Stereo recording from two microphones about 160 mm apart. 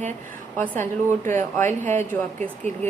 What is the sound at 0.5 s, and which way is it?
A woman's voice, 15° left (ahead or behind).